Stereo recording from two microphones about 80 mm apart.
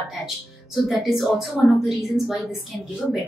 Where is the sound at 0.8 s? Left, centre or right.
Centre.